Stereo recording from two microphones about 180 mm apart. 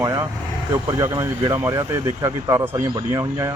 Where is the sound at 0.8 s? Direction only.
20° right (ahead or behind).